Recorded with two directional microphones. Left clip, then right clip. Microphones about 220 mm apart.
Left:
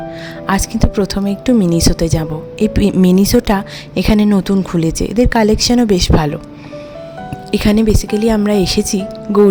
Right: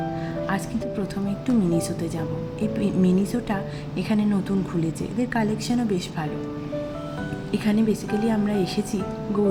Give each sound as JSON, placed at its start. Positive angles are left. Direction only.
{"t": 0.4, "sound": "a woman's voice", "side_deg": 50}
{"t": 7.5, "sound": "a woman's voice", "side_deg": 50}